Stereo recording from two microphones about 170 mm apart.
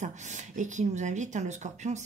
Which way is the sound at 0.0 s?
45° right (ahead or behind).